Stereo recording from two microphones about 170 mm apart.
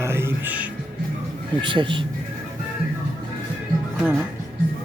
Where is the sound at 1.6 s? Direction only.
30° right (ahead or behind).